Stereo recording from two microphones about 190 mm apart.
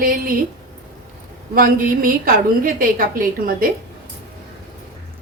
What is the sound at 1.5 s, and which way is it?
A woman's voice, 50° right (ahead or behind).